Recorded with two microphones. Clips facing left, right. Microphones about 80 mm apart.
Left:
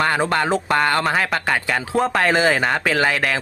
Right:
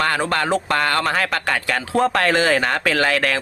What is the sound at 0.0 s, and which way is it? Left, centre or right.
A man's voice, centre.